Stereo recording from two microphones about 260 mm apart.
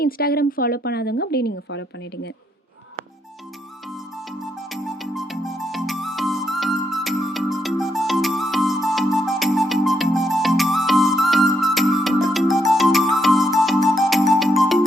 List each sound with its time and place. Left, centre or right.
0.0 s speech: left
3.8 s music: centre